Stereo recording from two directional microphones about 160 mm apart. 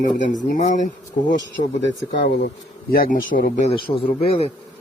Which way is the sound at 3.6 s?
35° left (ahead or behind).